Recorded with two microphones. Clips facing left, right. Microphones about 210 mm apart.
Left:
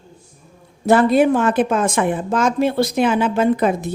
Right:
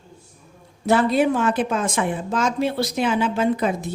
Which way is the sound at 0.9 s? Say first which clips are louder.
Left 5 dB; 50° left (ahead or behind).